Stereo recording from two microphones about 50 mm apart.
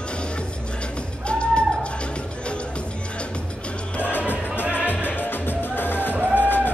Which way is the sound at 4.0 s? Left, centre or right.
Left.